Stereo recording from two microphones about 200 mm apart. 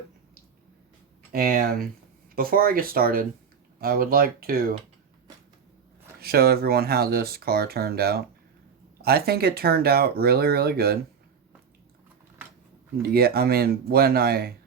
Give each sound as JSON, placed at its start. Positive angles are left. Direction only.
{"t": 1.3, "sound": "speech", "side_deg": -45}
{"t": 6.1, "sound": "speech", "side_deg": -50}
{"t": 13.0, "sound": "speech", "side_deg": -50}